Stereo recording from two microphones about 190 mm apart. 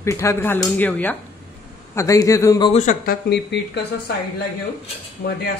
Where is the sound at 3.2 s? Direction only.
60° left (ahead or behind).